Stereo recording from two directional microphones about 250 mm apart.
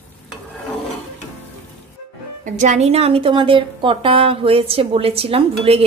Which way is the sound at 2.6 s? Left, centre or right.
Right.